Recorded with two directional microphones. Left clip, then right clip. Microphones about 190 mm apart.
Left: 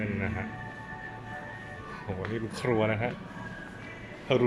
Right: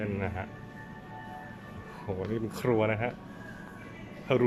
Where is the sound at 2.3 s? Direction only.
10° right (ahead or behind).